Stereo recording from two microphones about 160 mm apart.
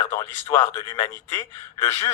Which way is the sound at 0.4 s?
25° left (ahead or behind).